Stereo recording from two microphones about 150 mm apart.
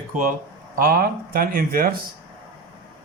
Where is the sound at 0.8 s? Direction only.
80° right.